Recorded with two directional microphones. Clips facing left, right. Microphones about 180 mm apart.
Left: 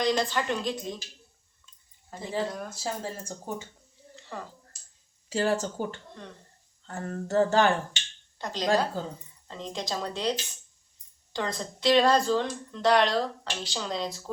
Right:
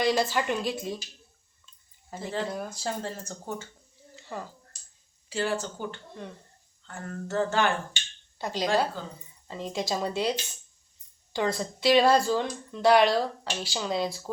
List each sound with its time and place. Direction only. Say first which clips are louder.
0.0 s speech: right 1 dB; 5° right (ahead or behind)
2.0 s speech: left 1 dB; 5° right (ahead or behind); by 3.7 s 15° left (ahead or behind)
4.1 s a sound: right 2 dB; 5° right (ahead or behind)
5.3 s speech: left 3 dB; 40° left (ahead or behind)
8.4 s speech: even; 5° right (ahead or behind)